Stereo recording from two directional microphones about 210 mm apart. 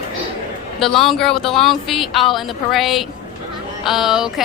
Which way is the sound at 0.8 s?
Centre (ahead or behind).